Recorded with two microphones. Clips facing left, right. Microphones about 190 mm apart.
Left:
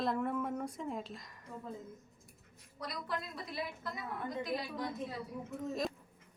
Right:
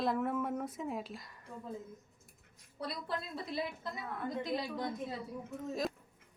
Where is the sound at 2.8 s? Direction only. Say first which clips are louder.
Right 1 dB; 30° right (ahead or behind).